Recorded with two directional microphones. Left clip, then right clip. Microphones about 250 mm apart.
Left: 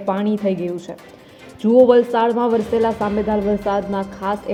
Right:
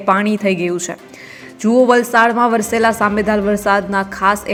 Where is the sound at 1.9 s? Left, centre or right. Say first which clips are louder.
Right 3 dB; centre.